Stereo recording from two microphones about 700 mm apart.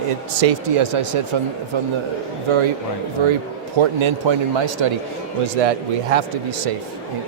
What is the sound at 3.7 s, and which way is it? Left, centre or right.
Speech, right.